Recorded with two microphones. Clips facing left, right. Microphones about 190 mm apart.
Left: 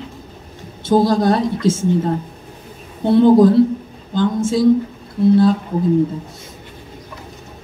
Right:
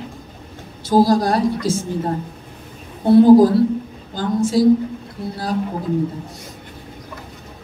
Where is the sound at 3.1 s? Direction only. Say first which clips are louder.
Right 1 dB; 25° left (ahead or behind).